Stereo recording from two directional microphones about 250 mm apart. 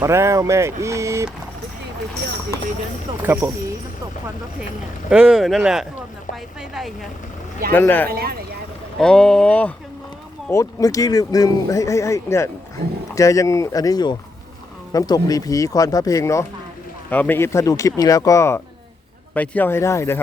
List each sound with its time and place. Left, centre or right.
0.0 s speech: centre
3.2 s speech: centre
5.0 s speech: centre
8.1 s speech: right
9.0 s speech: centre